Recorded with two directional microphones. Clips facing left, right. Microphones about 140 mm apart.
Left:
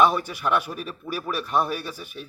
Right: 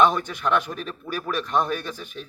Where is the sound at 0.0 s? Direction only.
10° left (ahead or behind).